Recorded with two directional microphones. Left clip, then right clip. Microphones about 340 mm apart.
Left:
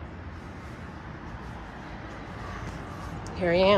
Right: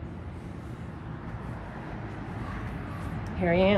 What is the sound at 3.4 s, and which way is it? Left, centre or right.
Speech, centre.